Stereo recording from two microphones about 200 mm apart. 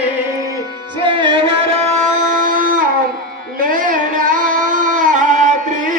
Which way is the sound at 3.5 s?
45° right (ahead or behind).